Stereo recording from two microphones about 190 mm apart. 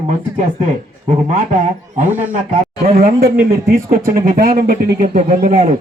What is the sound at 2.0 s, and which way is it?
A man's voice, 40° right (ahead or behind).